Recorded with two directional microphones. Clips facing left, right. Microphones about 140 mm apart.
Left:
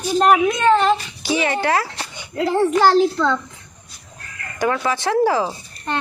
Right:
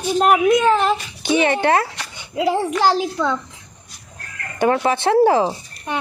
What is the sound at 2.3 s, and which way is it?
A woman's voice, 10° right (ahead or behind).